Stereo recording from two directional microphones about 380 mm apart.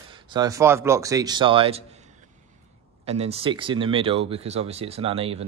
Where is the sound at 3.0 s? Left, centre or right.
Centre.